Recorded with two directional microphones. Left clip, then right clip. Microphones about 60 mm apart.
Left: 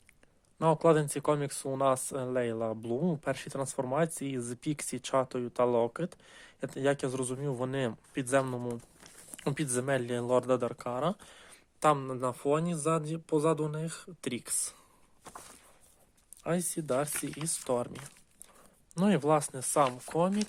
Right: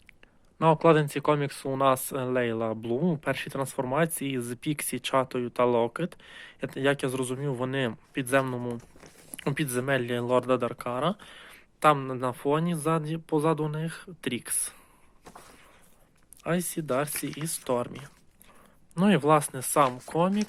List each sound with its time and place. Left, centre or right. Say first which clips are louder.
0.6 s speech: right 4 dB; left
2.8 s speech: right 4 dB; left
16.4 s speech: right 3 dB; left
17.4 s speech: right 3 dB; left
19.0 s speech: right 5 dB; left